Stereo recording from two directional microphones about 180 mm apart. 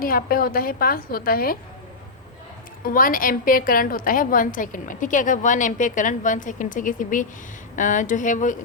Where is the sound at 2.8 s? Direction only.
50° left (ahead or behind).